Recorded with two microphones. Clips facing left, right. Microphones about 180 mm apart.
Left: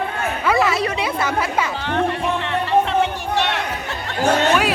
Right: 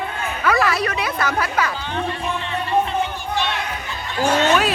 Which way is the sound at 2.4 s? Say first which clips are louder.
Left 2 dB; 75° left (ahead or behind).